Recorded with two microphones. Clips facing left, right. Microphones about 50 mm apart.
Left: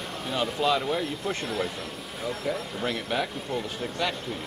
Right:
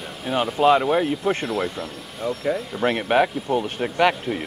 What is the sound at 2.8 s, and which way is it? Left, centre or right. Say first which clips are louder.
Speech: right 11 dB; right.